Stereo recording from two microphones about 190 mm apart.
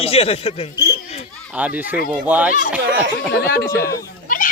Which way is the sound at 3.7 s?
50° left (ahead or behind).